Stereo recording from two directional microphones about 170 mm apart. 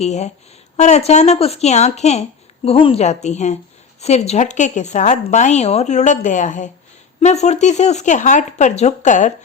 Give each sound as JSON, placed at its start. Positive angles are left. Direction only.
{"t": 0.0, "sound": "a woman's voice", "side_deg": 40}